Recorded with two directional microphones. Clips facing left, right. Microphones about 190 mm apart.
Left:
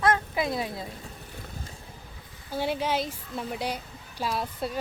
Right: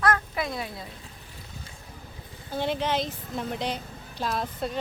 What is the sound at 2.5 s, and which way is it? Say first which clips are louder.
Speech: right 1 dB; 10° left (ahead or behind).